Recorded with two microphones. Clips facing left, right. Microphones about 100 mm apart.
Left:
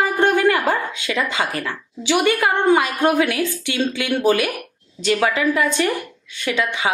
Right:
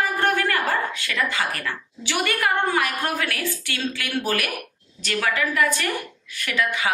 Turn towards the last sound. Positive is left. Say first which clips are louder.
# left 3 dB
turn(degrees=20)  # may be behind; listen again after turning